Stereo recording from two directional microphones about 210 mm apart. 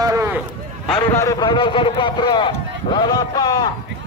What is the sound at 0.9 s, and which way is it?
A man's voice, 10° left (ahead or behind).